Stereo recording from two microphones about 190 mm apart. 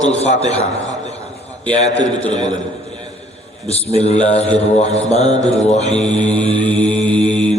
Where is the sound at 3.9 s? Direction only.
35° left (ahead or behind).